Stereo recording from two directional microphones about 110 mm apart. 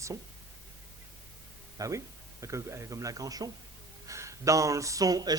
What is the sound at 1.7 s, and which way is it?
A man's voice, 30° right (ahead or behind).